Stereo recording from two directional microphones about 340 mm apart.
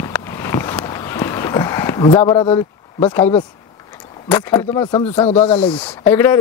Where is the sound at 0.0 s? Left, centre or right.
Centre.